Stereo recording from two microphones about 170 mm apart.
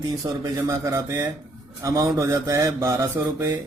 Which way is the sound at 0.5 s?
20° right (ahead or behind).